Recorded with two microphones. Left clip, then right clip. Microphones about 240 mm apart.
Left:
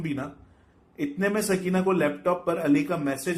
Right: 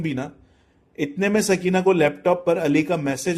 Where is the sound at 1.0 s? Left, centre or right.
Right.